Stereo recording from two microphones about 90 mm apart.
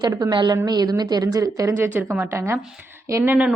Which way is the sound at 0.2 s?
55° right (ahead or behind).